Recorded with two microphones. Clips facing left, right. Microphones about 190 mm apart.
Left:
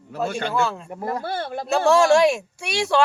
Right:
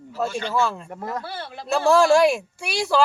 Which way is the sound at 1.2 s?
50° left (ahead or behind).